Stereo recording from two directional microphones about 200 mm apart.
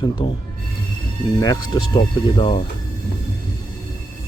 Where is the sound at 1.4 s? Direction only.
20° left (ahead or behind).